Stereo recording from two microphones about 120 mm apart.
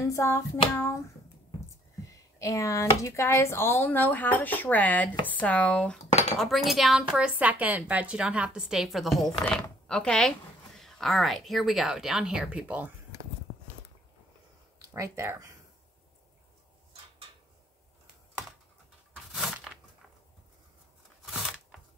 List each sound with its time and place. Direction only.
0.0 s hands: 25° left (ahead or behind)
2.0 s speech: 25° left (ahead or behind); by 12.9 s 15° right (ahead or behind)
14.9 s speech: 25° right (ahead or behind)
19.3 s a sound: 5° right (ahead or behind)